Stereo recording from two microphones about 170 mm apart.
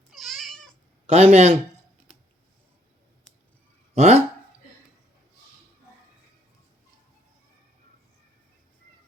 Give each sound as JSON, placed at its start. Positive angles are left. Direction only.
{"t": 0.1, "sound": "cat", "side_deg": 0}
{"t": 1.0, "sound": "a man's voice", "side_deg": -40}
{"t": 3.9, "sound": "speech", "side_deg": -40}